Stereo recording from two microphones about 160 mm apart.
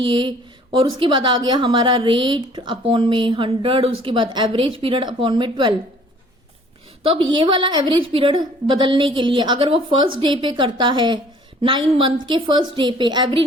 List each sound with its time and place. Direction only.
0.0 s a woman's voice: 30° right (ahead or behind)
7.0 s a woman's voice: 35° right (ahead or behind)